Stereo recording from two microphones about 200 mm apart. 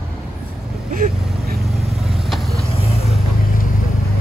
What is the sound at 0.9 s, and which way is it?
Vehicle, 45° right (ahead or behind).